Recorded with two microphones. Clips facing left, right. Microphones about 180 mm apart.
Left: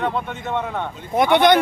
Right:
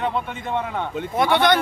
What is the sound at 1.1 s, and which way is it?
Speech, 20° left (ahead or behind).